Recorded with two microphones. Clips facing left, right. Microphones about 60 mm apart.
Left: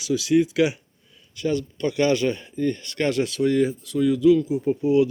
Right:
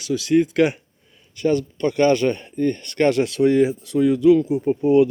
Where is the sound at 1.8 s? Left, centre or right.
Right.